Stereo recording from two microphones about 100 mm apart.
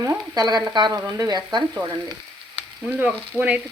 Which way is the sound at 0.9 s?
35° right (ahead or behind).